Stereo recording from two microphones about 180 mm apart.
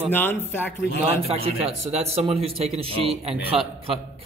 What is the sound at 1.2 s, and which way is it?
A man's voice, 35° right (ahead or behind).